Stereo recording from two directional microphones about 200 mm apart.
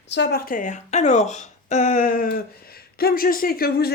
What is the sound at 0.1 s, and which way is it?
Speech, 55° left (ahead or behind).